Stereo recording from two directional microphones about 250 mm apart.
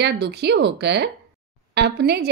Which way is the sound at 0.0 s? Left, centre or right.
Right.